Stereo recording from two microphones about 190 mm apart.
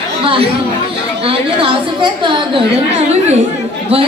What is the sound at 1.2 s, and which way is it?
A woman's voice, 30° right (ahead or behind).